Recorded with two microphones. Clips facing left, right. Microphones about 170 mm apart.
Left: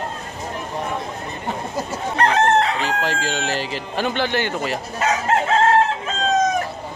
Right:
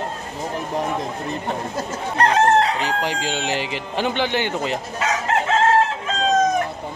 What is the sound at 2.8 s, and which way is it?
Speech, 15° right (ahead or behind).